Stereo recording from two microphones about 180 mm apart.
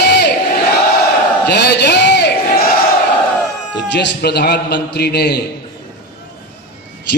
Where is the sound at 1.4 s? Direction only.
65° left (ahead or behind).